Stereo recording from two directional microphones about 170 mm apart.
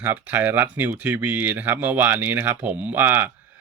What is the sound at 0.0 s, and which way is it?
Speech, 10° right (ahead or behind).